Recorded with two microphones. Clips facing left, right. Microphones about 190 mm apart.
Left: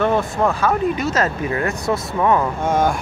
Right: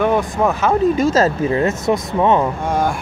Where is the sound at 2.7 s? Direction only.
Centre (ahead or behind).